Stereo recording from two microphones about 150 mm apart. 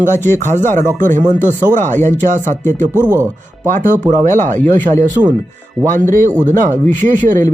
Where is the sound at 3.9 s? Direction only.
60° right (ahead or behind).